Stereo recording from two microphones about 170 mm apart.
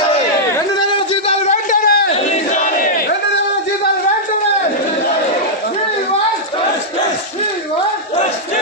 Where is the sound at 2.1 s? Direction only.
45° left (ahead or behind).